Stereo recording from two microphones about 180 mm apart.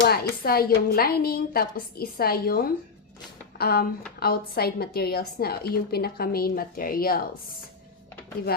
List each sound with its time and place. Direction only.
0.0 s a woman's voice: 55° left (ahead or behind)